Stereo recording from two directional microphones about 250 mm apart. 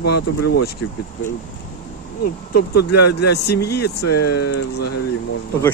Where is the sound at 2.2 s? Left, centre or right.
Left.